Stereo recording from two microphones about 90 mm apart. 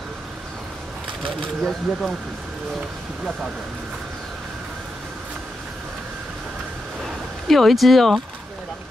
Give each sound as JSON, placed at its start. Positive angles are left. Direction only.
{"t": 1.6, "sound": "speech", "side_deg": 0}
{"t": 7.4, "sound": "speech", "side_deg": 0}